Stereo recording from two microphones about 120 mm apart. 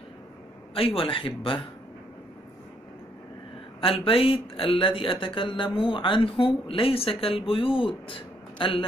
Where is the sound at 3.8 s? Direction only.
50° left (ahead or behind).